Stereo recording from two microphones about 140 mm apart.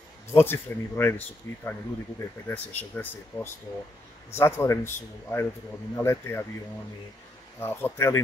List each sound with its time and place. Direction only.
0.3 s speech: 20° left (ahead or behind)
4.3 s speech: 15° left (ahead or behind)
7.6 s speech: 20° left (ahead or behind)